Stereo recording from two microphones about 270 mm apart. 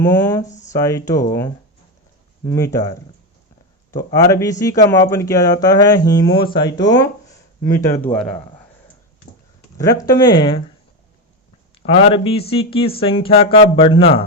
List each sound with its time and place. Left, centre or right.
0.0 s speech: centre
0.4 s a sound: left
0.7 s speech: centre
2.5 s speech: centre
9.7 s speech: centre
11.9 s speech: left